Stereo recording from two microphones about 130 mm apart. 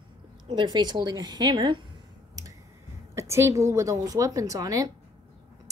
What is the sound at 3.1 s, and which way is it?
A woman's voice, 20° right (ahead or behind).